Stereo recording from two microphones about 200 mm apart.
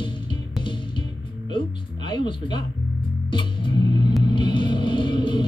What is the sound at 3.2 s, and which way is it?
Music, 25° left (ahead or behind).